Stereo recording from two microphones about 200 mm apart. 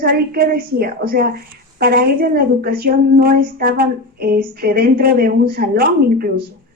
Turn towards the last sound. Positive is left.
turn(degrees=-50)  # may be behind; listen again after turning